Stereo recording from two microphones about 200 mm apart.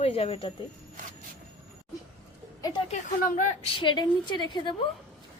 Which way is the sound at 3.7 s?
25° left (ahead or behind).